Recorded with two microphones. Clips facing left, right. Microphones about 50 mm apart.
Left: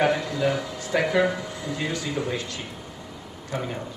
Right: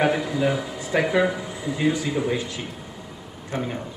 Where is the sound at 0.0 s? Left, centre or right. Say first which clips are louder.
Right 1 dB; centre.